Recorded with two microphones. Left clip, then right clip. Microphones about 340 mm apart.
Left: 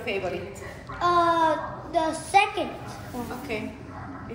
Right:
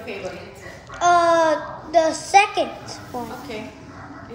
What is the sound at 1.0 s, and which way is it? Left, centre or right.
A child's voice, centre.